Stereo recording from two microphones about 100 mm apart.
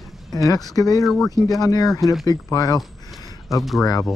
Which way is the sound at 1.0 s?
Centre (ahead or behind).